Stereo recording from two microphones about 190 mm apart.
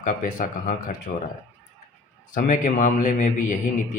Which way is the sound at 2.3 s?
45° left (ahead or behind).